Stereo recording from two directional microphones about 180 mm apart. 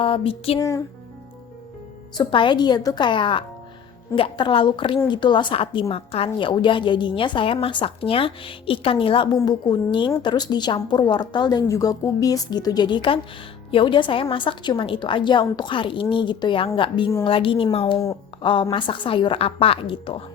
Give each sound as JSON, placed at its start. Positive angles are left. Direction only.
{"t": 0.0, "sound": "a woman's voice", "side_deg": 30}
{"t": 2.1, "sound": "a woman's voice", "side_deg": 25}